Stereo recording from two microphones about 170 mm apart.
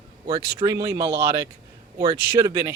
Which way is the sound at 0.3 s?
20° right (ahead or behind).